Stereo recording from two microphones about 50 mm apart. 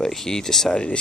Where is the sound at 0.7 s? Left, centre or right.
Left.